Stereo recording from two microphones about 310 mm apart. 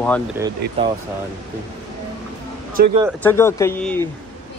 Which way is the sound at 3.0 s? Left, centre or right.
Centre.